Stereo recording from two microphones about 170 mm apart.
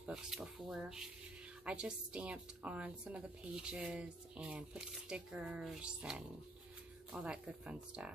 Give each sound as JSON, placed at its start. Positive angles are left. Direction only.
{"t": 0.0, "sound": "speech", "side_deg": -5}